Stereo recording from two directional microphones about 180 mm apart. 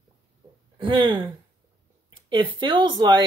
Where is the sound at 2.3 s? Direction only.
30° right (ahead or behind).